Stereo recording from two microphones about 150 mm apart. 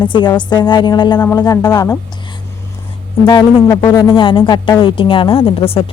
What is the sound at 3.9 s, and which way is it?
Speech, 20° left (ahead or behind).